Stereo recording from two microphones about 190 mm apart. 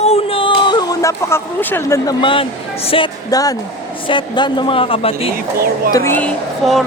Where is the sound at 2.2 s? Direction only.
30° left (ahead or behind).